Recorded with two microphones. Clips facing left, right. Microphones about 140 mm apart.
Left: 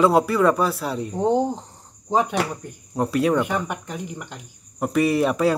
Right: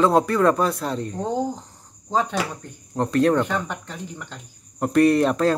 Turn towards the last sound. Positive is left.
turn(degrees=5)  # may be behind; listen again after turning